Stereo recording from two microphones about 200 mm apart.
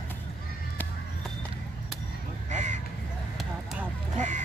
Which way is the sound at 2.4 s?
35° right (ahead or behind).